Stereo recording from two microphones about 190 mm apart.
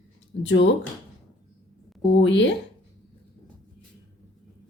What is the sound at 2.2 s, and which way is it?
Speech, 75° left (ahead or behind).